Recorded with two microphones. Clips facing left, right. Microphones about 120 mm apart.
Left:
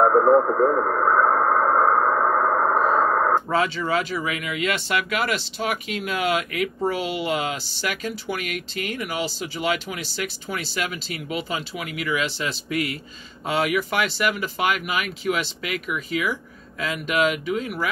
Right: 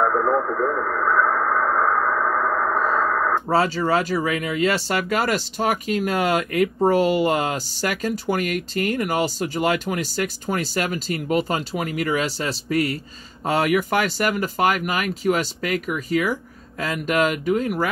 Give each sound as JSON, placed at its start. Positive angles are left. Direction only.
{"t": 0.0, "sound": "radio", "side_deg": 35}
{"t": 3.4, "sound": "speech", "side_deg": -40}